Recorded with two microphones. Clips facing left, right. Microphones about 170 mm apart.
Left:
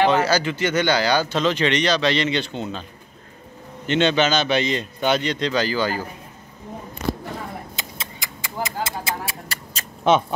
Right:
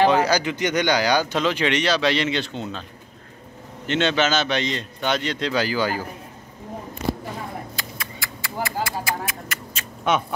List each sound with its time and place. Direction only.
0.1 s speech: 15° right (ahead or behind)
3.8 s a man's voice: centre (ahead or behind)
7.7 s a sound: 20° left (ahead or behind)